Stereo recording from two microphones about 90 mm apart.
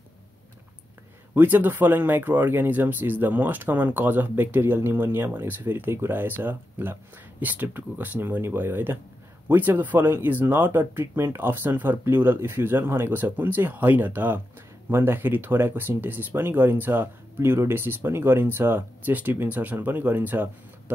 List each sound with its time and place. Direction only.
1.3 s speech: 20° right (ahead or behind)